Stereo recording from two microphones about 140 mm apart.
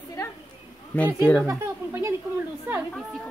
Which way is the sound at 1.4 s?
20° right (ahead or behind).